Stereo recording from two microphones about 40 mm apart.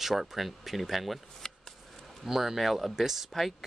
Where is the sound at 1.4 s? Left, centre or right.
Centre.